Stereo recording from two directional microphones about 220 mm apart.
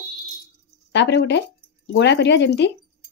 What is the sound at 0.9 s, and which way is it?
Speech, 50° left (ahead or behind).